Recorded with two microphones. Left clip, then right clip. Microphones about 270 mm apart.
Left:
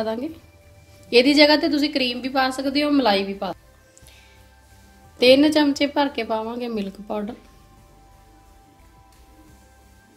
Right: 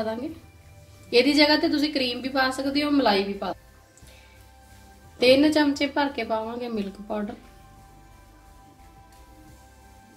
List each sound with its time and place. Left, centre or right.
0.0 s a woman's voice: left
5.2 s a woman's voice: left